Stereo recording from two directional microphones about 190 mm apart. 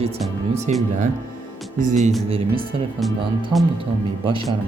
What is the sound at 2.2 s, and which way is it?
Speech, 30° right (ahead or behind).